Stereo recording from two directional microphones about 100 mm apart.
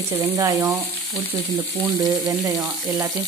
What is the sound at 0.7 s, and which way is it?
Frying, 20° right (ahead or behind).